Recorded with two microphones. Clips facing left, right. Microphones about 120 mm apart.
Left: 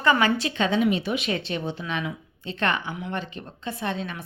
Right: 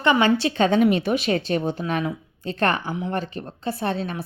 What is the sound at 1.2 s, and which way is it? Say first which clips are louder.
A woman's voice: right 5 dB; 35° right (ahead or behind).